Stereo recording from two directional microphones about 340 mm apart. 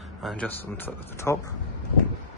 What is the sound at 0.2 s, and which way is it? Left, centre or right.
A man's voice, centre.